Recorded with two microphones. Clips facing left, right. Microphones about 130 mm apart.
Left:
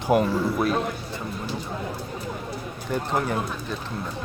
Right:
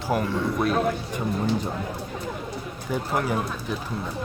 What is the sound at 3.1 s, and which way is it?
Speech, 5° right (ahead or behind).